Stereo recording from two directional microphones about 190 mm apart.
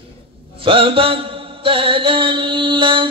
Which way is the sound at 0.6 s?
30° right (ahead or behind).